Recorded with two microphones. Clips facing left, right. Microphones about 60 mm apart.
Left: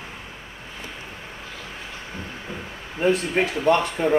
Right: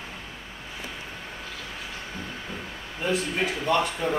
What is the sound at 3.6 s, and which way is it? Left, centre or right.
Speech, left.